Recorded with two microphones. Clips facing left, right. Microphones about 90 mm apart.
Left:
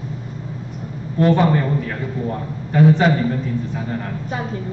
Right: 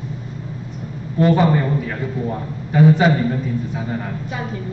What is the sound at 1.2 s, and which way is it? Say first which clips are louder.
A man's voice: even; 5° right (ahead or behind).